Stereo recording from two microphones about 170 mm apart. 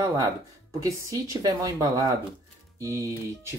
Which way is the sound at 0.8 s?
20° right (ahead or behind).